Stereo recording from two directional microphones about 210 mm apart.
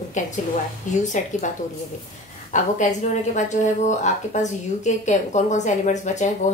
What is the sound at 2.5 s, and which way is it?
A woman's voice, 35° left (ahead or behind).